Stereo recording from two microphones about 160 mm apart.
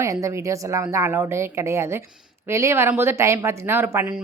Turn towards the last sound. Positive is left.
turn(degrees=-15)  # may be behind; listen again after turning